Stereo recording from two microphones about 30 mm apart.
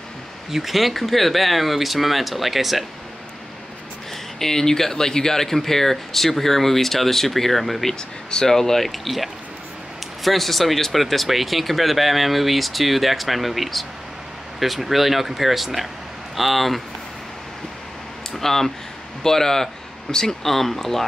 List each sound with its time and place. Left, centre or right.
0.5 s speech: centre
4.4 s speech: centre
8.3 s speech: centre
8.8 s speech: centre
18.3 s speech: centre
20.4 s speech: centre